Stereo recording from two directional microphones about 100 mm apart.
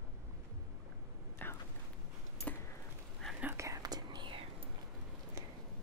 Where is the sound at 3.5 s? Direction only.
35° right (ahead or behind); by 4.4 s 50° right (ahead or behind).